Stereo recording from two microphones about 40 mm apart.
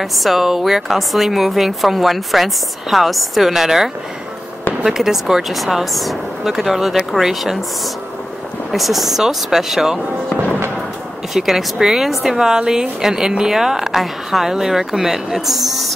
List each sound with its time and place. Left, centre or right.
0.0 s speech: centre
8.7 s speech: centre
11.3 s speech: centre